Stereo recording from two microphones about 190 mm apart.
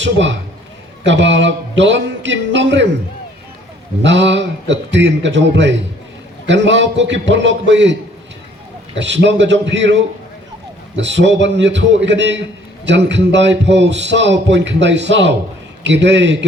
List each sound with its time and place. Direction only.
0.0 s a man's voice: 75° right (ahead or behind)
4.0 s a man's voice: 70° right (ahead or behind)
9.0 s a man's voice: 70° right (ahead or behind)